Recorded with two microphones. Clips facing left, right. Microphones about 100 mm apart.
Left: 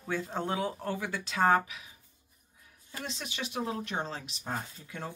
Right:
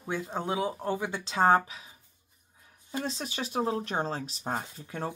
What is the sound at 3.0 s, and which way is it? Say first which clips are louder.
Speech: right 3 dB; 40° right (ahead or behind).